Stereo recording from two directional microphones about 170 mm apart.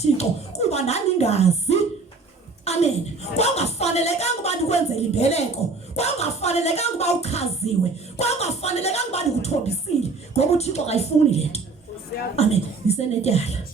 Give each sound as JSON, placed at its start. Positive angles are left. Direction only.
{"t": 0.0, "sound": "a woman's voice", "side_deg": 40}
{"t": 2.6, "sound": "a sound", "side_deg": 40}
{"t": 3.3, "sound": "speech", "side_deg": 40}